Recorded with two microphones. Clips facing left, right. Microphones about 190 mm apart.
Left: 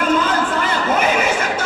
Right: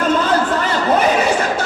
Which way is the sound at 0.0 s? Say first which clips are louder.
Right 2 dB; 35° right (ahead or behind).